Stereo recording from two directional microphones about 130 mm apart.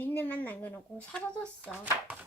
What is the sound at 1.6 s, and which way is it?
Chopping, 10° right (ahead or behind).